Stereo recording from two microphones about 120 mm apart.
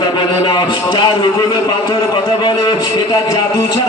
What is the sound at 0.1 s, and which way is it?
A man's voice, 35° left (ahead or behind).